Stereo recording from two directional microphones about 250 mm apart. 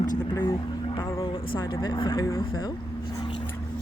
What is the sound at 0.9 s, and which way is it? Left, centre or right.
Vehicle, centre.